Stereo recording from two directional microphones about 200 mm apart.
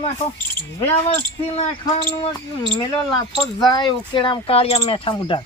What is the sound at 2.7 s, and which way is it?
Speech, 20° left (ahead or behind).